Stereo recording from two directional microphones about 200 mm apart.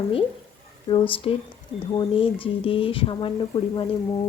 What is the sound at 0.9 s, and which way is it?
Speech, 25° left (ahead or behind).